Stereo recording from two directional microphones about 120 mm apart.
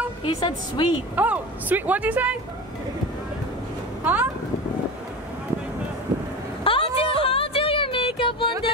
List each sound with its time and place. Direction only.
0.2 s a woman's voice: 45° left (ahead or behind)
1.1 s a woman's voice: 15° right (ahead or behind)
4.0 s speech: 15° right (ahead or behind)
6.6 s a sound: 50° left (ahead or behind)